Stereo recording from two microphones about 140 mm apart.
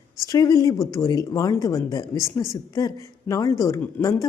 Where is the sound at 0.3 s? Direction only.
25° left (ahead or behind).